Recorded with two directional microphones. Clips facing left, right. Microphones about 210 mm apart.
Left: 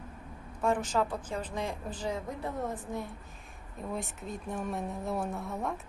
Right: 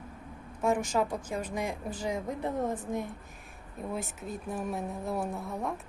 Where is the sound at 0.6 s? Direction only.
10° right (ahead or behind).